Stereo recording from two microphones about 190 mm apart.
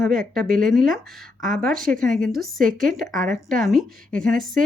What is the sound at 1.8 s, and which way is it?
Speech, 45° right (ahead or behind).